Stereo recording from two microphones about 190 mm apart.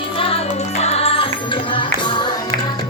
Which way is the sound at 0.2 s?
30° left (ahead or behind).